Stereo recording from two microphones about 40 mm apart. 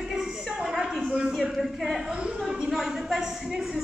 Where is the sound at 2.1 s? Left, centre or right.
Right.